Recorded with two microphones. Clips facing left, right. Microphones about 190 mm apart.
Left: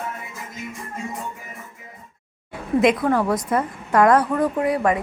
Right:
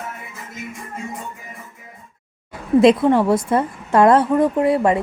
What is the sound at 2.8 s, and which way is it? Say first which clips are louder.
Speech: right 5 dB; 25° right (ahead or behind).